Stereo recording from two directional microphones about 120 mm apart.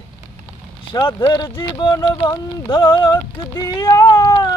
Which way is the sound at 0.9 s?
35° left (ahead or behind).